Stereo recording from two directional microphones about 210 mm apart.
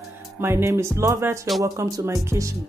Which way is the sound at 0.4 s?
10° right (ahead or behind).